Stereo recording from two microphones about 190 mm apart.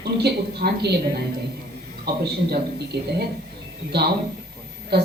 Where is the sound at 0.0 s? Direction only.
60° right (ahead or behind).